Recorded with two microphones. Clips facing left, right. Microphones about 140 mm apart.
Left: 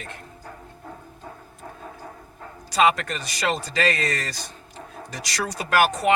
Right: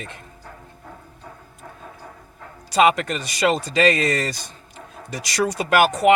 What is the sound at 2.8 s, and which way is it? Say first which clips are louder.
Speech: right 3 dB; 15° right (ahead or behind).